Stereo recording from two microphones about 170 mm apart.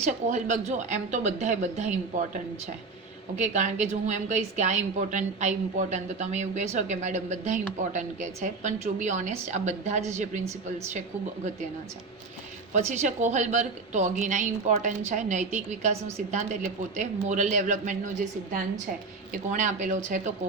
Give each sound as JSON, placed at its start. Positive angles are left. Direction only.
{"t": 0.3, "sound": "a woman's voice", "side_deg": -45}
{"t": 12.7, "sound": "a woman's voice", "side_deg": -45}